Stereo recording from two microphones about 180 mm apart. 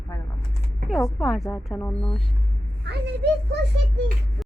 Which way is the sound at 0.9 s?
Centre (ahead or behind).